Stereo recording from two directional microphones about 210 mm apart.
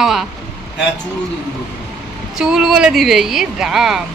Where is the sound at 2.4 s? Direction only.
5° right (ahead or behind).